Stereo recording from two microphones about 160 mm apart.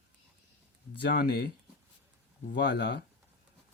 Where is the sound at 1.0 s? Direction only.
85° left.